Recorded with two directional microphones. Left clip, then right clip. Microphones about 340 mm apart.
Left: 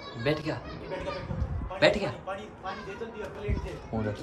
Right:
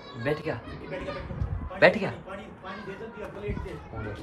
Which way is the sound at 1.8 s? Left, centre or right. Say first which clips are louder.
Right 3 dB; centre.